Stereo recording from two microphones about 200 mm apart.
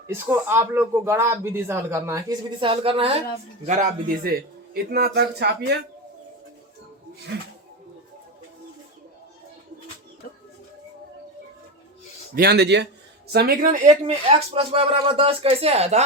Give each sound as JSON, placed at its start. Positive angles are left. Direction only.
{"t": 0.1, "sound": "a man's voice", "side_deg": -10}
{"t": 3.7, "sound": "a man's voice", "side_deg": -40}
{"t": 7.3, "sound": "a man's voice", "side_deg": -60}
{"t": 12.3, "sound": "a man's voice", "side_deg": -50}